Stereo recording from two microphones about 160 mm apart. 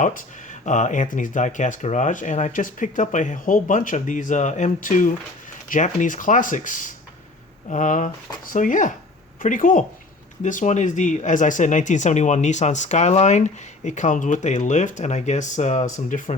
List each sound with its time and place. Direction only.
0.0 s speech: 55° left (ahead or behind)